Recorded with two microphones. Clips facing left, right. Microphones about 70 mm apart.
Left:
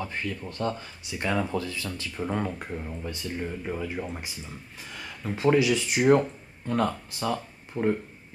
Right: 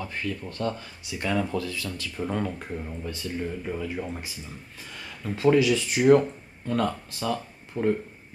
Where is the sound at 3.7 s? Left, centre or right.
Centre.